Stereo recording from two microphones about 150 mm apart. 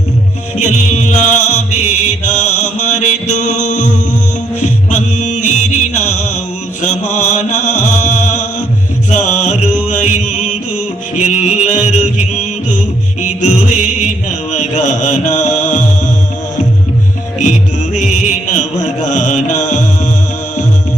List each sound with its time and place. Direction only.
0.5 s music: 50° left (ahead or behind)
6.8 s mantra: 55° left (ahead or behind)
9.0 s music: 50° left (ahead or behind)
13.2 s music: 55° left (ahead or behind)
14.5 s mantra: 55° left (ahead or behind)
17.4 s music: 55° left (ahead or behind)